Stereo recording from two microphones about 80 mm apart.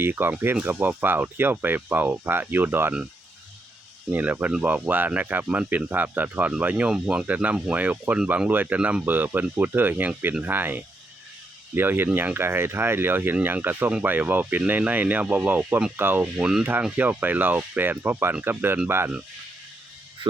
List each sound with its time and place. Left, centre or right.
0.0 s speech: right
4.1 s speech: centre
17.0 s speech: right